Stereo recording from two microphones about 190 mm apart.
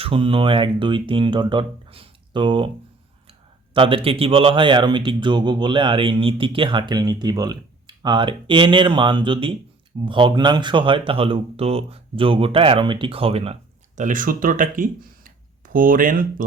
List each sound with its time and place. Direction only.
0.0 s speech: 30° right (ahead or behind)
3.8 s speech: 30° right (ahead or behind); by 16.2 s 45° right (ahead or behind)